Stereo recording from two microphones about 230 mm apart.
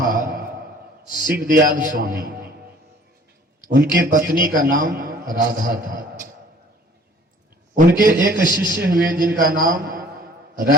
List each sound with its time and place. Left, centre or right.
0.1 s a sound: right
1.2 s a man's voice: right
3.7 s a man's voice: right
7.9 s a man's voice: right